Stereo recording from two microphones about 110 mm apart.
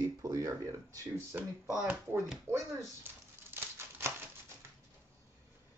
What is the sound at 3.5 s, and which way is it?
Scissors, 20° right (ahead or behind).